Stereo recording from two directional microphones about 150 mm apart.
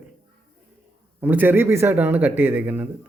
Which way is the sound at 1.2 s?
15° right (ahead or behind).